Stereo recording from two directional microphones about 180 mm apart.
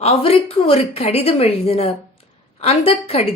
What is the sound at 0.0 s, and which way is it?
A woman's voice, 35° left (ahead or behind).